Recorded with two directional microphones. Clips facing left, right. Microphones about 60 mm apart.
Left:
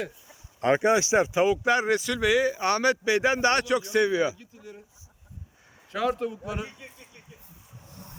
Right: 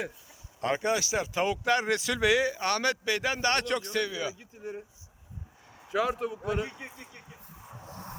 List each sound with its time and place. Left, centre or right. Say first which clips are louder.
0.6 s speech: left 6 dB; left
1.3 s speech: left 4 dB; centre
2.0 s speech: left 2 dB; centre
2.6 s speech: left 5 dB; centre
3.2 s speech: left 5 dB; left
3.6 s speech: left 5 dB; centre
3.9 s speech: left 8 dB; left
4.5 s speech: right 6 dB; right
5.9 s speech: left 1 dB; centre
6.7 s speech: right 3 dB; right